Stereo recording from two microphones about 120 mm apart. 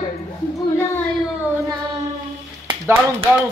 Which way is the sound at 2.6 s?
20° right (ahead or behind).